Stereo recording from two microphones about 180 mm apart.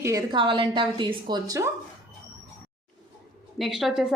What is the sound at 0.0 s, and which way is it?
A woman's voice, 15° right (ahead or behind).